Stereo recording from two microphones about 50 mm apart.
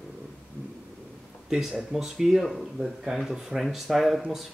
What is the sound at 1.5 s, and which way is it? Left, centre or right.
Speech, centre.